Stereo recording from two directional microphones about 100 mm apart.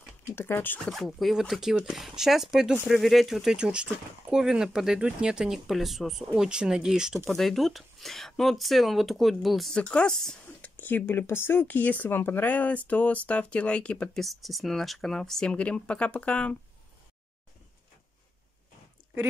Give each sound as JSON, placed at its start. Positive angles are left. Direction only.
{"t": 0.4, "sound": "speech", "side_deg": 25}
{"t": 0.8, "sound": "speech", "side_deg": 0}
{"t": 14.2, "sound": "speech", "side_deg": 0}